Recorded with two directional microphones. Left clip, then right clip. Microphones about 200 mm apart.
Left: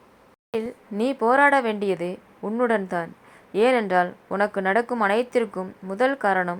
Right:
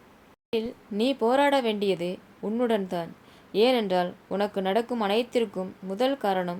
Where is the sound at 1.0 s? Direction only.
5° left (ahead or behind).